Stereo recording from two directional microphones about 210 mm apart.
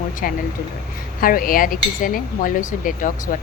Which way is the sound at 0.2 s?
40° left (ahead or behind).